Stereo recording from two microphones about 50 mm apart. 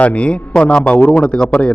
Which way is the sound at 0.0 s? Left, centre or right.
Left.